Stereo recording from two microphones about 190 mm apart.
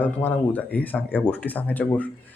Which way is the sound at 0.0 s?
10° left (ahead or behind).